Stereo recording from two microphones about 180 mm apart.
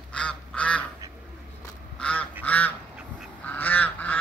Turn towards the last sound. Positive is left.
turn(degrees=10)  # may be behind; listen again after turning